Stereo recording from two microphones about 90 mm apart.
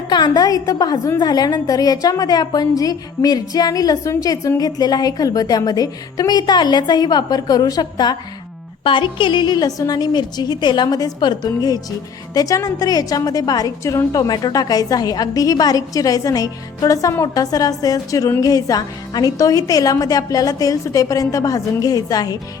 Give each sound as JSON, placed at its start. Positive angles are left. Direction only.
{"t": 0.1, "sound": "a woman's voice", "side_deg": 50}
{"t": 8.8, "sound": "a woman's voice", "side_deg": 65}